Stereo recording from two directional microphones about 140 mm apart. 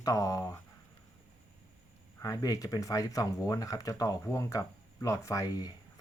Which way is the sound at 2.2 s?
25° left (ahead or behind).